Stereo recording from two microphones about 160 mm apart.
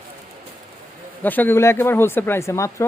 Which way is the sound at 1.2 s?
10° left (ahead or behind).